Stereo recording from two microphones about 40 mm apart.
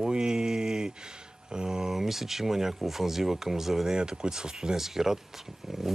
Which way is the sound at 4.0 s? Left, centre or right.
Centre.